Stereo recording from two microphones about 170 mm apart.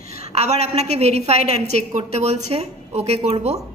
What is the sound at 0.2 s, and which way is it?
A woman's voice, 40° right (ahead or behind).